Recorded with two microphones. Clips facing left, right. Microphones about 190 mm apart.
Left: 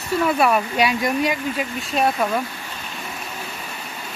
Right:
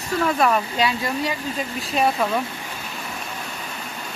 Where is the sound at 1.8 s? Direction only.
Centre (ahead or behind).